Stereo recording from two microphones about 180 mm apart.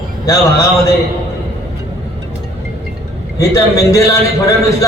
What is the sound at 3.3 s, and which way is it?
Speech, 20° left (ahead or behind).